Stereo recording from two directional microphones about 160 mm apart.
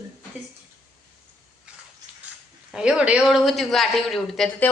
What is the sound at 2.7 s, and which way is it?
A man's voice, 5° right (ahead or behind).